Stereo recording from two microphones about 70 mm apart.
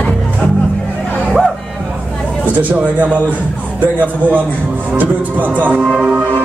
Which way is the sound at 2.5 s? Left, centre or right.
Right.